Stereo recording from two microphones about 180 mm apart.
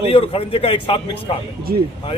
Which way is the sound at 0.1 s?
30° left (ahead or behind).